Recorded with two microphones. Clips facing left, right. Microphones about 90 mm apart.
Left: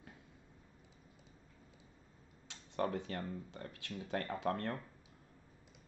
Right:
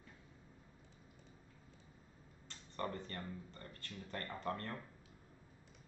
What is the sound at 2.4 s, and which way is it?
Speech, 75° left (ahead or behind).